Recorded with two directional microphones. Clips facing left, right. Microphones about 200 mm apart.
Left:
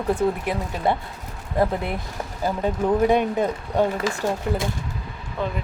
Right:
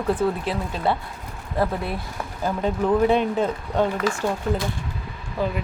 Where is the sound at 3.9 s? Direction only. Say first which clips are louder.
Even; 40° left (ahead or behind).